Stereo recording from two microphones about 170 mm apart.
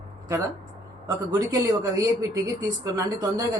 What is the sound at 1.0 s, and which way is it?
Speech, 20° right (ahead or behind).